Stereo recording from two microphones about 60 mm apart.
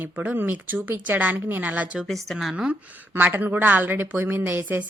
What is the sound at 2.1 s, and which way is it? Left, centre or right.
Speech, centre.